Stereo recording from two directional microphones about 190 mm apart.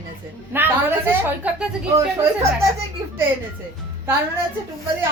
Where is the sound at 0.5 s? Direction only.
10° right (ahead or behind).